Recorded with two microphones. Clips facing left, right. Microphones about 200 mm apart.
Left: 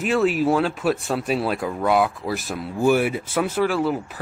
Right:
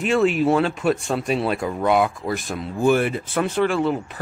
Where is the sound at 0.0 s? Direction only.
5° left (ahead or behind).